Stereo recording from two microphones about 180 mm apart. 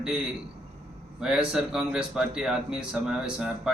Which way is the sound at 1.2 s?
5° right (ahead or behind).